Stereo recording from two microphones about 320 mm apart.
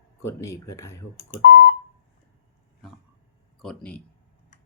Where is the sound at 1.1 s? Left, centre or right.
Left.